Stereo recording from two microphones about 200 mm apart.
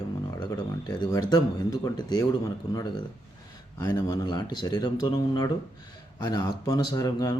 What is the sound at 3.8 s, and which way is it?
Speech, 20° left (ahead or behind).